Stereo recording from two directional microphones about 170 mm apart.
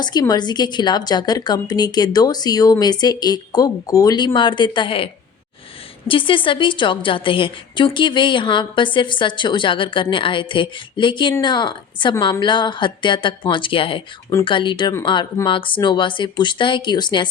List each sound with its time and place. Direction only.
0.0 s a woman's voice: 25° left (ahead or behind)
6.1 s a woman's voice: 30° left (ahead or behind)